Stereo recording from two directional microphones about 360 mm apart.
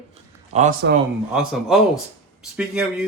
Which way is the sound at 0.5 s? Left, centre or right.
Right.